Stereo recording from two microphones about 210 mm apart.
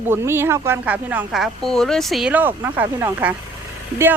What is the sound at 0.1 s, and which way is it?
Speech, 10° right (ahead or behind).